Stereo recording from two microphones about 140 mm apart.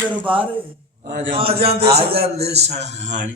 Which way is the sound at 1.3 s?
45° right (ahead or behind).